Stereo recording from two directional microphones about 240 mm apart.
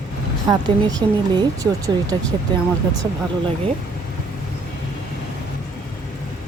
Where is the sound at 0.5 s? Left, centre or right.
Centre.